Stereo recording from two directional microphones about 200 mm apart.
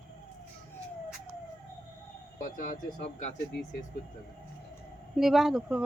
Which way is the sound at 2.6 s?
40° left (ahead or behind).